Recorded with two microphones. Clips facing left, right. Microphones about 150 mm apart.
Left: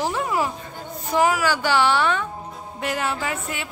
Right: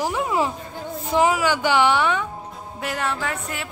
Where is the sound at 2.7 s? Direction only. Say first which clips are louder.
Left 1 dB; centre (ahead or behind).